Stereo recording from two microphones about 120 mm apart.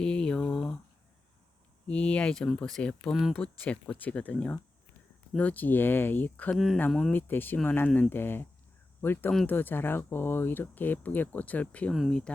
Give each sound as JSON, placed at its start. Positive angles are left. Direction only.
{"t": 0.0, "sound": "a sound", "side_deg": 10}
{"t": 1.9, "sound": "speech", "side_deg": 10}
{"t": 3.6, "sound": "speech", "side_deg": 10}